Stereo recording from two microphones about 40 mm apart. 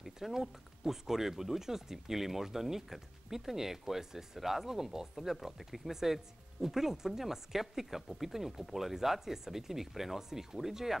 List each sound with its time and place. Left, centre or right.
0.0 s speech: centre